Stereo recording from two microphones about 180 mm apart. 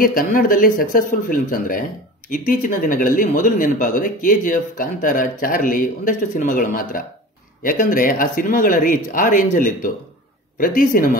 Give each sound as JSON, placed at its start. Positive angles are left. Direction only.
{"t": 0.0, "sound": "speech", "side_deg": 50}